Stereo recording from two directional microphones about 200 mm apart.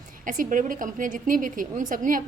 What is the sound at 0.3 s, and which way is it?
A woman's voice, 40° right (ahead or behind).